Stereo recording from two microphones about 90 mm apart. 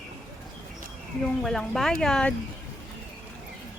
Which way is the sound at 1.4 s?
5° left (ahead or behind).